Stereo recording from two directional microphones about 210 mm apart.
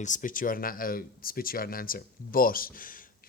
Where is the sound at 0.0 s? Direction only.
40° left (ahead or behind).